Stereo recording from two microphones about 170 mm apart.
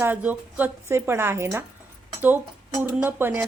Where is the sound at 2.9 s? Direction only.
10° right (ahead or behind).